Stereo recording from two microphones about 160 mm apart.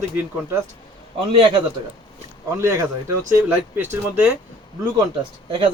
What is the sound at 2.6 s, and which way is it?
Speech, 15° right (ahead or behind).